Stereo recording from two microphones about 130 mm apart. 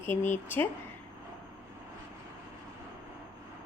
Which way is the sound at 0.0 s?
20° left (ahead or behind).